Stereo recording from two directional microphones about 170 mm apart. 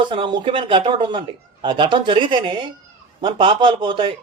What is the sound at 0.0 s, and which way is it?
Speech, 30° right (ahead or behind).